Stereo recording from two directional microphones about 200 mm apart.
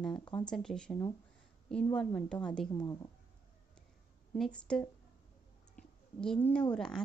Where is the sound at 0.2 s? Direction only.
20° left (ahead or behind).